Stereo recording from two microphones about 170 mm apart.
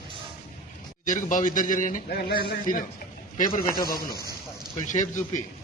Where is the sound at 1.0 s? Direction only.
50° left (ahead or behind).